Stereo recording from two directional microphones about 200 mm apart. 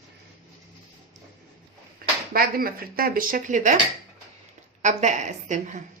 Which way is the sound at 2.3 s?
45° right (ahead or behind).